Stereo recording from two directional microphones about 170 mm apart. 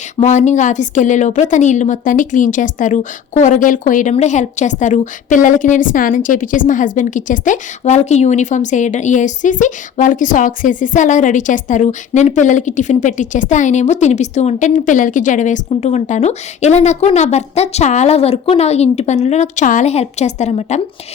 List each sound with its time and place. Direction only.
0.2 s a woman's voice: 45° left (ahead or behind)